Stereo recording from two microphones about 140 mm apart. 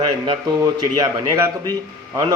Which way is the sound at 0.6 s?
25° right (ahead or behind).